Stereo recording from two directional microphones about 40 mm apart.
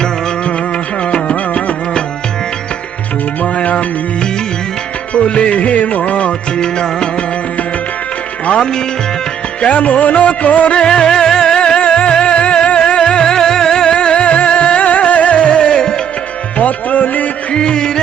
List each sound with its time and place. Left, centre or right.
1.1 s music: left
3.4 s music: left
5.1 s music: left
6.6 s music: centre
8.5 s music: centre
9.6 s music: left
10.8 s music: centre
11.9 s music: left
15.4 s music: left
16.6 s music: left
17.5 s music: left